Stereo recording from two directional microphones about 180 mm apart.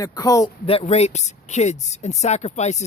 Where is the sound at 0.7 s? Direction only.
35° left (ahead or behind).